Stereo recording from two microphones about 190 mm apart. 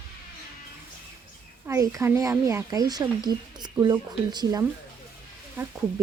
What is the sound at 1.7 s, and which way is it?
Speech, 15° right (ahead or behind).